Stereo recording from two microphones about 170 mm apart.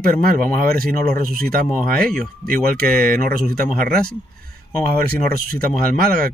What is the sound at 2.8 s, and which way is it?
Speech, 60° right (ahead or behind).